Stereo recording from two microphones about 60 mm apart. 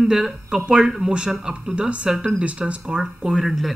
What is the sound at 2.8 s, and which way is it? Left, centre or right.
Speech, centre.